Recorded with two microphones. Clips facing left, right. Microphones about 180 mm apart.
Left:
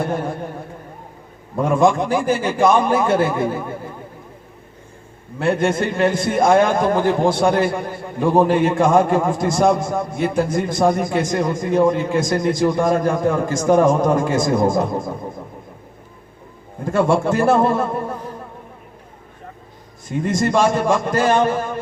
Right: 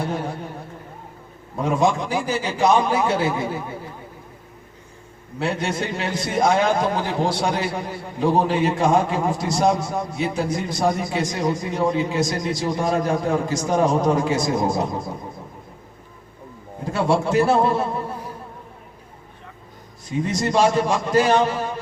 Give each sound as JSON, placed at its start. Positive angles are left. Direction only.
{"t": 0.0, "sound": "a man's voice", "side_deg": 50}
{"t": 1.5, "sound": "a man's voice", "side_deg": 50}
{"t": 5.4, "sound": "a man's voice", "side_deg": 50}
{"t": 16.8, "sound": "a man's voice", "side_deg": 50}
{"t": 20.1, "sound": "a man's voice", "side_deg": 50}